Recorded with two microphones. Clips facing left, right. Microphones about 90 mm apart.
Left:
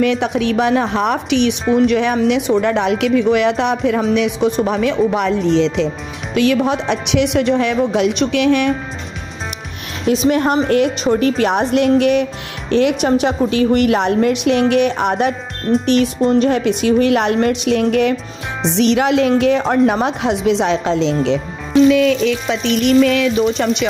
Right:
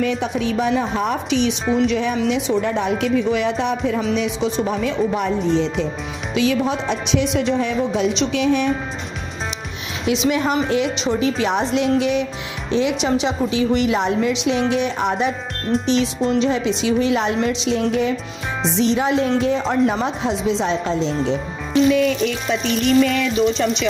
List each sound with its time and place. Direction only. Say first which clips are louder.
0.0 s a woman's voice: left 5 dB; 65° left (ahead or behind); by 5.9 s 80° left
6.3 s a woman's voice: left 4 dB; 60° left (ahead or behind)
10.0 s a woman's voice: left 4 dB; 45° left (ahead or behind); by 19.3 s 80° left
19.4 s a woman's voice: left 5 dB; 60° left (ahead or behind)
23.0 s a woman's voice: left 4 dB; 60° left (ahead or behind)